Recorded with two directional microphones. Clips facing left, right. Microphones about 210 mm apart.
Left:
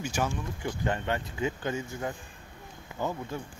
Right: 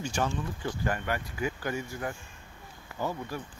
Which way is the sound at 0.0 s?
10° left (ahead or behind).